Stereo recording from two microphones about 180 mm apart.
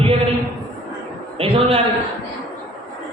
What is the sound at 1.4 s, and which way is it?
Speech, 30° right (ahead or behind).